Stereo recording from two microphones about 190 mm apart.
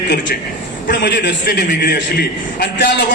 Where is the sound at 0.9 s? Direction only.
65° left (ahead or behind).